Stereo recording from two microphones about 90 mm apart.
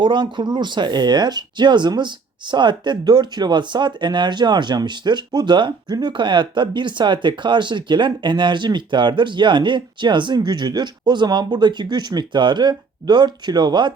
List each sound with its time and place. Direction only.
0.0 s speech: 60° right (ahead or behind)